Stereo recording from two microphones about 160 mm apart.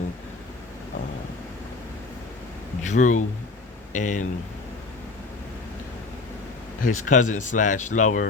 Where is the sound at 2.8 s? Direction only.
50° left (ahead or behind).